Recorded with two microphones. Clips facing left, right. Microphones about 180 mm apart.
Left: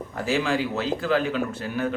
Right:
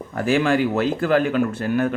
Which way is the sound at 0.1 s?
55° right (ahead or behind).